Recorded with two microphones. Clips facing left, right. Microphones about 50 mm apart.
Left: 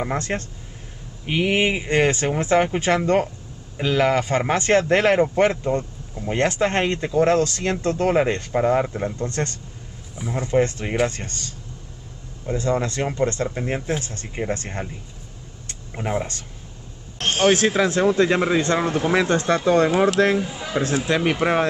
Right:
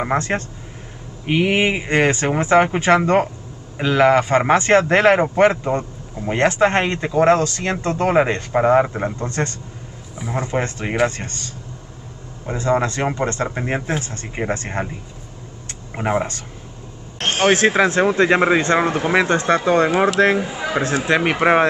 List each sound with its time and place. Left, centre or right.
0.3 s a man's voice: right
12.4 s a man's voice: right
17.4 s a man's voice: right